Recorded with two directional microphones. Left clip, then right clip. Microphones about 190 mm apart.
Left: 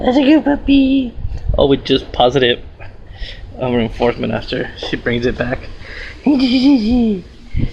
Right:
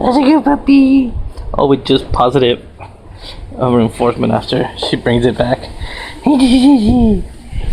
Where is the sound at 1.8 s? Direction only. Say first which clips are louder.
Right 3 dB; 45° right (ahead or behind).